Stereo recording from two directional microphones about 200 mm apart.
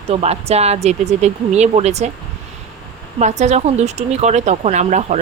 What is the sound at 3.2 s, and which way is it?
Speech, 35° right (ahead or behind).